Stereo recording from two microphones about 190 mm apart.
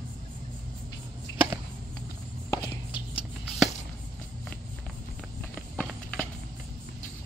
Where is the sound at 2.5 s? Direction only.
25° left (ahead or behind).